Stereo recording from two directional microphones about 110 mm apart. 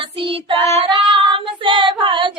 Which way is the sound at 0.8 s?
50° right (ahead or behind).